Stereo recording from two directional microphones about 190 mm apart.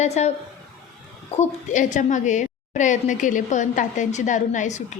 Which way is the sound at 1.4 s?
40° left (ahead or behind).